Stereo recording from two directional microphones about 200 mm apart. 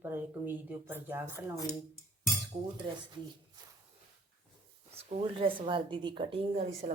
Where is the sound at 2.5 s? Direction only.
30° right (ahead or behind).